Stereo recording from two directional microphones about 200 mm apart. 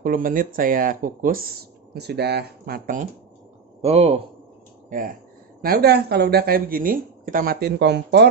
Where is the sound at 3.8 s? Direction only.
30° right (ahead or behind).